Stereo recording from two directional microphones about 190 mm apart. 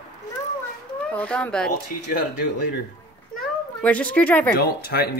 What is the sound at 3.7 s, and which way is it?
Speech, 5° left (ahead or behind).